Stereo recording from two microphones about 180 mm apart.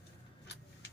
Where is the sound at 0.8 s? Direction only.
75° left (ahead or behind).